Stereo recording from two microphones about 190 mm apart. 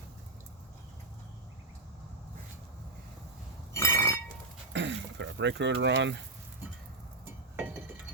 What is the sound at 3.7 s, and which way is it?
Chink, 15° left (ahead or behind).